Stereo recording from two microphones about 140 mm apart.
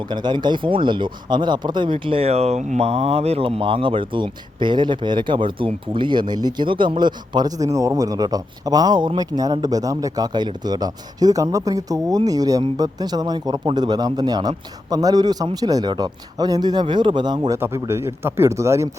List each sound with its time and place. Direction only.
0.1 s speech: 35° right (ahead or behind)
17.7 s speech: 20° right (ahead or behind)